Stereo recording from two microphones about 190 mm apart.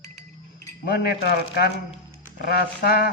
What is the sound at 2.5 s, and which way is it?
Speech, 55° left (ahead or behind).